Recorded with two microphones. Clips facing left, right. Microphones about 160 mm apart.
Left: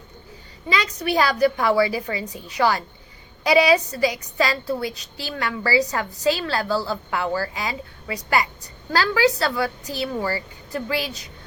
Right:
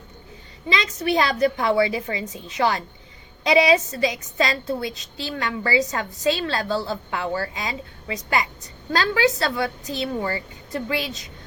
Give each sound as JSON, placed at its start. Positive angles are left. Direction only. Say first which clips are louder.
{"t": 0.7, "sound": "a woman's voice", "louder": "even", "side_deg": -25}
{"t": 8.9, "sound": "a woman's voice", "louder": "left 1 dB", "side_deg": -20}
{"t": 10.2, "sound": "speech", "louder": "left 3 dB", "side_deg": 35}
{"t": 10.7, "sound": "a woman's voice", "louder": "even", "side_deg": -20}